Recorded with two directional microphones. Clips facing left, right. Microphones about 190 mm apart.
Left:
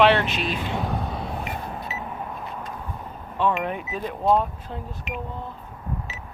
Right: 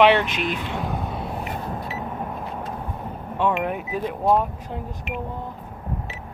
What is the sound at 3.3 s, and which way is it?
Speech, 10° right (ahead or behind).